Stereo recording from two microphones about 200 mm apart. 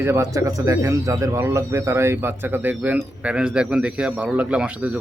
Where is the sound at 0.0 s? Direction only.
15° right (ahead or behind).